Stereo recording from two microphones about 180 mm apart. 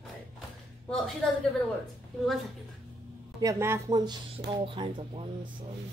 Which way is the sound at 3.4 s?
15° right (ahead or behind).